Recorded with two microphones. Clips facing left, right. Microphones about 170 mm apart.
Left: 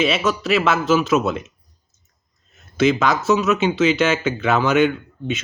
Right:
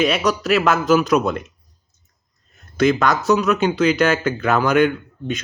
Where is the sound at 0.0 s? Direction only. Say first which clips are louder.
Right 1 dB; centre (ahead or behind).